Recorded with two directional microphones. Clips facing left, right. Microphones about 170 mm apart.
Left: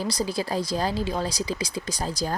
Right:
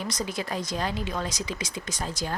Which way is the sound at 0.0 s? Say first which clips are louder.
Left 4 dB; 35° left (ahead or behind).